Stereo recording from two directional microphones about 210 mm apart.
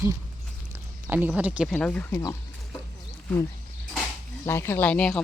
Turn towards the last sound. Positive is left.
turn(degrees=5)  # may be behind; listen again after turning